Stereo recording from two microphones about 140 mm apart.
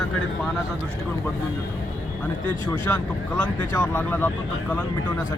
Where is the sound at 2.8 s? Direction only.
15° left (ahead or behind).